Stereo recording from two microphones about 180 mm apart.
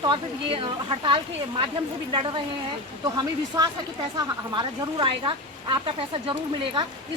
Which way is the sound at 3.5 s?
20° right (ahead or behind).